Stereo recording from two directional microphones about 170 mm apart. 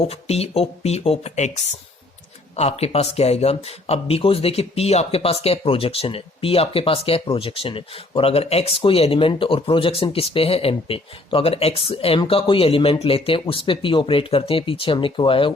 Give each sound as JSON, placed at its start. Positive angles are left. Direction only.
{"t": 0.1, "sound": "speech", "side_deg": 35}
{"t": 2.6, "sound": "speech", "side_deg": 40}